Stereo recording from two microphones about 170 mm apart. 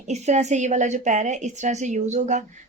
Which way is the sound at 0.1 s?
40° right (ahead or behind).